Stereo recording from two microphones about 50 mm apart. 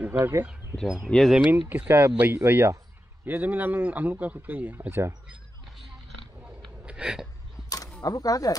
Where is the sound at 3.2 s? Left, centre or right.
Right.